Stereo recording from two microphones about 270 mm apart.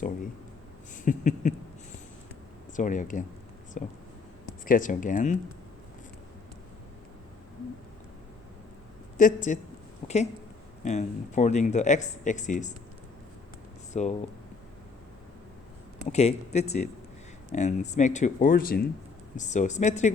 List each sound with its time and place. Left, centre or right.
1.0 s a sound: left
2.7 s speech: left
9.1 s speech: left
10.8 s speech: left
13.9 s speech: left
16.0 s speech: left